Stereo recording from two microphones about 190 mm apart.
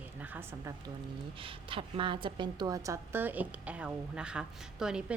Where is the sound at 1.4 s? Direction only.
30° right (ahead or behind).